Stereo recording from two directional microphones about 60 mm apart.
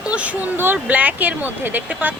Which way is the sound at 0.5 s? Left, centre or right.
Right.